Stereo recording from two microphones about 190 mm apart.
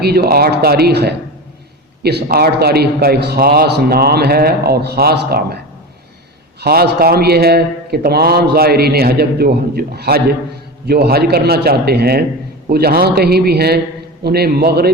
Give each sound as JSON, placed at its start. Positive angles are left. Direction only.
{"t": 0.0, "sound": "a man's voice", "side_deg": -55}
{"t": 6.6, "sound": "a man's voice", "side_deg": -55}